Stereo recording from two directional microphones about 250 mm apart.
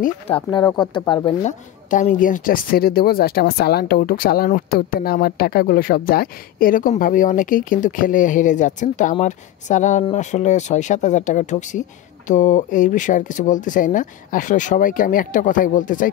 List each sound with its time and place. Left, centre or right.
0.3 s speech: centre